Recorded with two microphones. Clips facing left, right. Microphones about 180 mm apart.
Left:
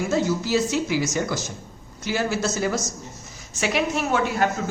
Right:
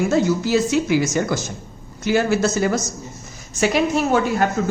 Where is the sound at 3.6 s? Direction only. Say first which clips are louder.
Right 5 dB; 40° right (ahead or behind).